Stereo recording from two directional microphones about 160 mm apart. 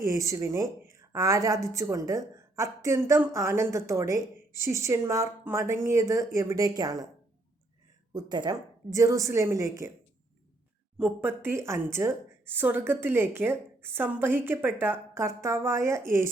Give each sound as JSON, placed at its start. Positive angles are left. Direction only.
{"t": 0.0, "sound": "speech", "side_deg": -20}
{"t": 8.1, "sound": "speech", "side_deg": -25}
{"t": 10.9, "sound": "a woman's voice", "side_deg": -10}